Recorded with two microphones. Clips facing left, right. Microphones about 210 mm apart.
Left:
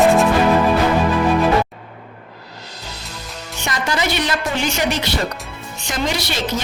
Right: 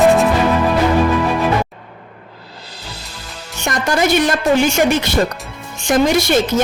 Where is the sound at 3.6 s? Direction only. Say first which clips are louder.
Right 5 dB; 50° right (ahead or behind).